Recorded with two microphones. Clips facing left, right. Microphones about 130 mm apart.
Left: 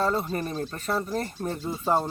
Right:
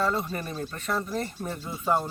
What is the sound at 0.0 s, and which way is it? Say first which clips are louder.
Speech: left 2 dB; 35° left (ahead or behind).